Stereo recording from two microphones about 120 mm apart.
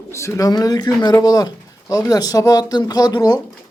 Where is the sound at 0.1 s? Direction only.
25° left (ahead or behind).